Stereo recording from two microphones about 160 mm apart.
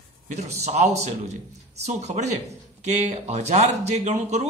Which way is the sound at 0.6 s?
45° right (ahead or behind).